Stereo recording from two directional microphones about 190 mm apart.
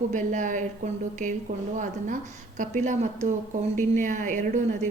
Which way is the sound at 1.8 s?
45° right (ahead or behind).